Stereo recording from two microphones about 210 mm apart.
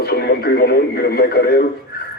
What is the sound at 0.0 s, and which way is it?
Speech, 50° left (ahead or behind).